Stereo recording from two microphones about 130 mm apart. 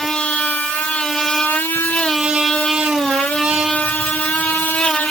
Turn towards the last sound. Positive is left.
turn(degrees=10)  # may be behind; listen again after turning